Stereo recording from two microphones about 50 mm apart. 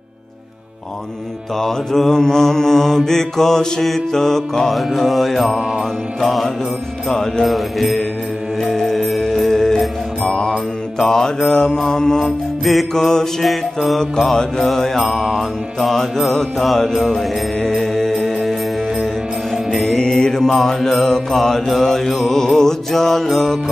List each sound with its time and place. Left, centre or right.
1.6 s mantra: centre
5.8 s music: centre
19.5 s mantra: centre